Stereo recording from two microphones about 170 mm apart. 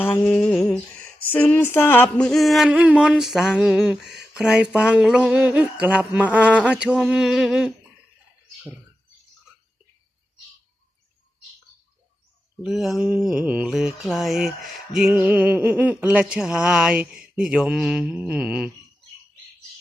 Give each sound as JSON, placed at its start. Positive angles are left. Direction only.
{"t": 0.0, "sound": "mantra", "side_deg": 10}
{"t": 4.4, "sound": "a sound", "side_deg": -5}
{"t": 12.6, "sound": "mantra", "side_deg": 0}